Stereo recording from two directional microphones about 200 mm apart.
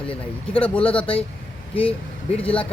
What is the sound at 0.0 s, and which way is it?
Speech, 25° left (ahead or behind).